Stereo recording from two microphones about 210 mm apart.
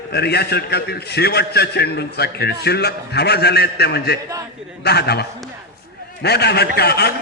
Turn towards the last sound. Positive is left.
turn(degrees=50)  # may be behind; listen again after turning